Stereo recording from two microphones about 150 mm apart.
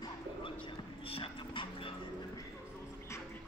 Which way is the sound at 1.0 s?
40° left (ahead or behind).